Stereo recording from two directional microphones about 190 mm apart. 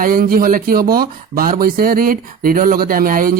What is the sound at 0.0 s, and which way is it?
Speech, 50° right (ahead or behind).